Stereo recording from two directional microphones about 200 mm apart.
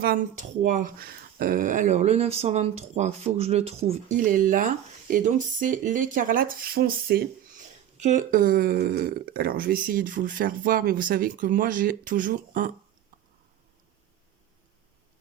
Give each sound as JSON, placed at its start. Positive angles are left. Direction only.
{"t": 0.0, "sound": "speech", "side_deg": -45}
{"t": 4.2, "sound": "speech", "side_deg": -40}